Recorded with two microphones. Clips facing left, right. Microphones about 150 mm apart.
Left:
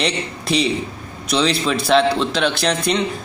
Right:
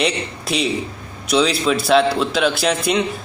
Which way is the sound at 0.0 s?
Centre (ahead or behind).